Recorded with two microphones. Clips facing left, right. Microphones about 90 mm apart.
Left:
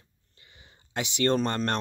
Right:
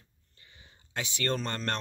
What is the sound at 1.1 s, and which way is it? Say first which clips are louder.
Speech: left 8 dB; 20° left (ahead or behind).